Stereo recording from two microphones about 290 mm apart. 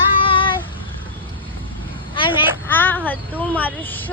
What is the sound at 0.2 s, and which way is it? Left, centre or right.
Child singing, centre.